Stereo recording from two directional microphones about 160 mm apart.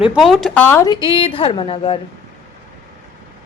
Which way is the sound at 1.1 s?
35° left (ahead or behind).